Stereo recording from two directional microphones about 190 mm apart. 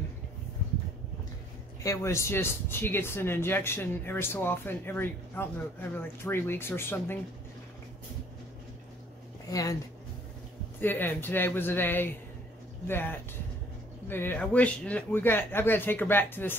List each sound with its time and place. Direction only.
1.8 s speech: 15° left (ahead or behind)
9.5 s speech: 20° left (ahead or behind)
10.8 s speech: 10° left (ahead or behind)